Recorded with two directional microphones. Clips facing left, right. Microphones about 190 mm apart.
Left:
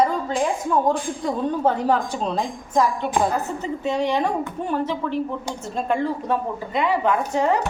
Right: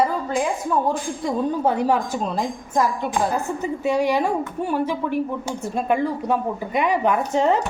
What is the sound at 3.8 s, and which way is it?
A woman's voice, 10° right (ahead or behind).